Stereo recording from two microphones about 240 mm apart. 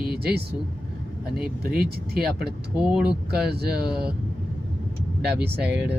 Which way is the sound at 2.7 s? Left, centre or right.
Centre.